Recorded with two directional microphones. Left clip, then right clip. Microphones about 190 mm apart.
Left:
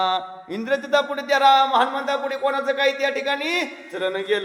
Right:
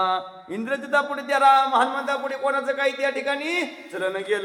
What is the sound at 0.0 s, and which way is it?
A man's voice, 30° left (ahead or behind).